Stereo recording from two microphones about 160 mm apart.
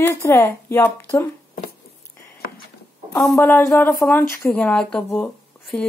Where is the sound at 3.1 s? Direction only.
Centre (ahead or behind).